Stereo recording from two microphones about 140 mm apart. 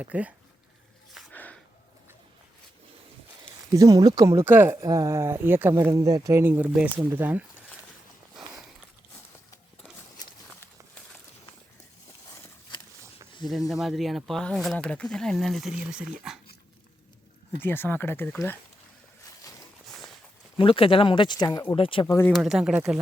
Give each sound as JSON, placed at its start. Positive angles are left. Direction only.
{"t": 0.0, "sound": "speech", "side_deg": -10}
{"t": 1.3, "sound": "a sound", "side_deg": 10}
{"t": 3.7, "sound": "speech", "side_deg": -25}
{"t": 13.4, "sound": "speech", "side_deg": 0}
{"t": 17.6, "sound": "speech", "side_deg": 15}
{"t": 20.6, "sound": "speech", "side_deg": 40}
{"t": 21.8, "sound": "speech", "side_deg": 40}
{"t": 22.0, "sound": "speech", "side_deg": 15}
{"t": 22.3, "sound": "speech", "side_deg": 0}